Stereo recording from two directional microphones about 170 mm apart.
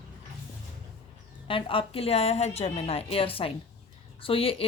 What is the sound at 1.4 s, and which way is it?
A woman's voice, 30° left (ahead or behind).